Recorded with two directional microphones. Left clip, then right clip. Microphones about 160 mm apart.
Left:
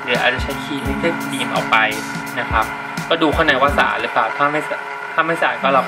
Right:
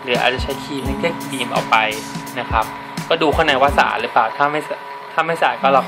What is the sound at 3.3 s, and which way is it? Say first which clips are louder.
Speech: right 1 dB; 20° right (ahead or behind).